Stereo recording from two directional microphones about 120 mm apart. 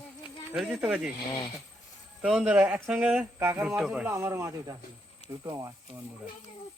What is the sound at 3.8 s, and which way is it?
Speech, 5° right (ahead or behind).